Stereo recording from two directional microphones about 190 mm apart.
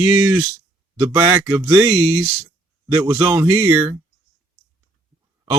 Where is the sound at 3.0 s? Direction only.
15° right (ahead or behind).